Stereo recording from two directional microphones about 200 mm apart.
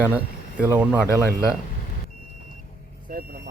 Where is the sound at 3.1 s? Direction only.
50° right (ahead or behind).